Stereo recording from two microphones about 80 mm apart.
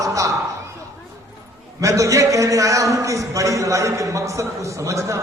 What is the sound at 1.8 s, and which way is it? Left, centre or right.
A man's voice, right.